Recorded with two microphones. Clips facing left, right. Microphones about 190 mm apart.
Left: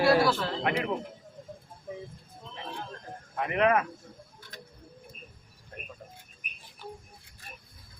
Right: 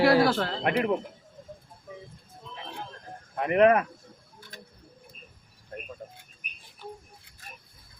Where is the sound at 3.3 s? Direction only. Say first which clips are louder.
Right 5 dB; 40° right (ahead or behind).